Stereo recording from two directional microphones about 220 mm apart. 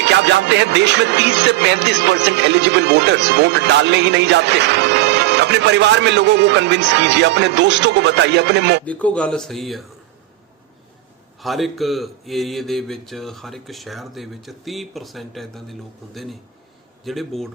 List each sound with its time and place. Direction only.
0.0 s music: 55° right (ahead or behind)
8.8 s speech: 5° left (ahead or behind)
11.3 s speech: centre (ahead or behind)